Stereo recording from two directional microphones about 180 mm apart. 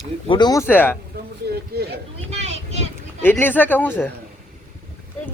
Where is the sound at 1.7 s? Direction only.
60° right (ahead or behind).